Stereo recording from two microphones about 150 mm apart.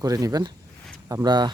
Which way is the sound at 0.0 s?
25° right (ahead or behind).